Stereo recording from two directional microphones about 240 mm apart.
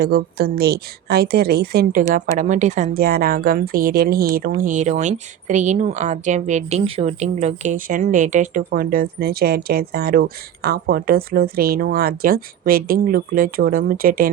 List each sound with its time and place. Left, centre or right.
0.0 s speech: right